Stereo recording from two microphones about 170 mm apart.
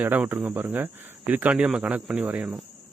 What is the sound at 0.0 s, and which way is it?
Speech, 10° right (ahead or behind).